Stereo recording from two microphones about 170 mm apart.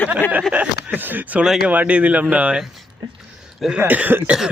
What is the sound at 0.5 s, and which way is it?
Speech, 10° right (ahead or behind).